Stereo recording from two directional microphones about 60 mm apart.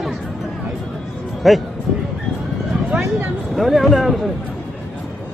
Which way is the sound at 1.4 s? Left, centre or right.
Centre.